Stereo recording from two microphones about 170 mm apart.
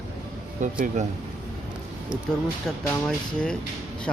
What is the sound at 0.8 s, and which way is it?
Speech, 45° right (ahead or behind).